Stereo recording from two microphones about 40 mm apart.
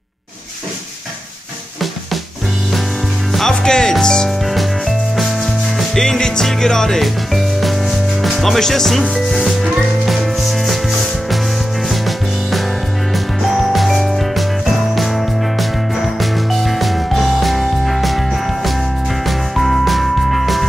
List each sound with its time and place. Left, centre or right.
3.3 s music: centre
4.5 s music: centre
5.9 s music: centre
8.2 s music: centre
8.5 s speech: centre
9.1 s music: centre
13.7 s music: centre
16.2 s music: centre